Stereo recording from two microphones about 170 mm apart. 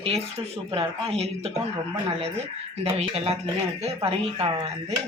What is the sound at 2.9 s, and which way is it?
Speech, 35° right (ahead or behind).